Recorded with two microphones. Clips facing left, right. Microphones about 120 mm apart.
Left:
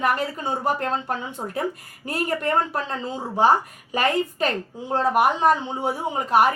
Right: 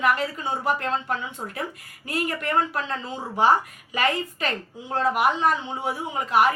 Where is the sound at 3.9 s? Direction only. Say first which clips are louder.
Left 3 dB; 40° left (ahead or behind).